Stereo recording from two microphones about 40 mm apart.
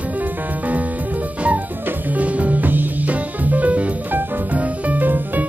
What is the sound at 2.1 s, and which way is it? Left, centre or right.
Music, right.